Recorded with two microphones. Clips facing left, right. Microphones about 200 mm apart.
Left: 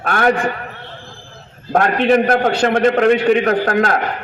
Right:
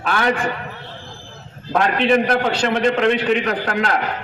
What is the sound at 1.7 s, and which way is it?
A man's voice, 50° left (ahead or behind).